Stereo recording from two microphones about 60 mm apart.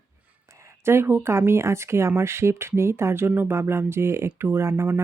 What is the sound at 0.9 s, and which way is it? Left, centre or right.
Speech, right.